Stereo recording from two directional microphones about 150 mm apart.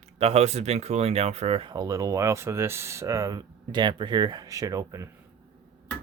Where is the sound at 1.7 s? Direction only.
20° right (ahead or behind).